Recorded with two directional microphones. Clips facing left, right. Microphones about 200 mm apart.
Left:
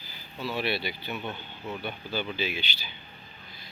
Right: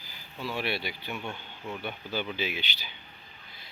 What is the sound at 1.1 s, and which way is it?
Speech, centre (ahead or behind).